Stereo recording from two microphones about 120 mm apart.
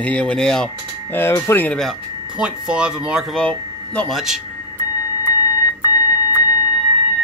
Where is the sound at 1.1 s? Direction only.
20° left (ahead or behind).